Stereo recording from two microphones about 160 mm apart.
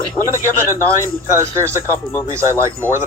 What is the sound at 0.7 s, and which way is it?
Speech, 15° right (ahead or behind).